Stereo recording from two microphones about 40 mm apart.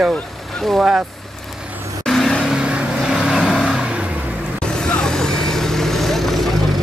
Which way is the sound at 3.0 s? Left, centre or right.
Centre.